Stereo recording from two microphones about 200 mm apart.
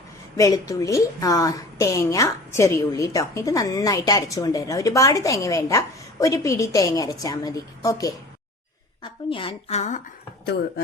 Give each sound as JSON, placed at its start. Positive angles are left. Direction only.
{"t": 0.3, "sound": "a woman's voice", "side_deg": 15}
{"t": 9.3, "sound": "a woman's voice", "side_deg": 25}